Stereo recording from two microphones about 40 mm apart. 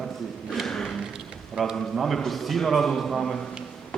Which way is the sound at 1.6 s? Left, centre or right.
Right.